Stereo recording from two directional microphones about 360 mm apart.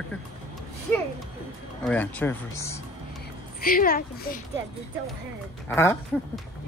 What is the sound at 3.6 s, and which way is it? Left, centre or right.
Speech, left.